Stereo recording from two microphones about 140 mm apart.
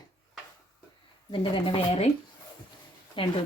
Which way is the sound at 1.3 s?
35° left (ahead or behind).